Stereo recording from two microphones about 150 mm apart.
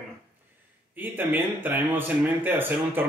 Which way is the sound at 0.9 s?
15° right (ahead or behind).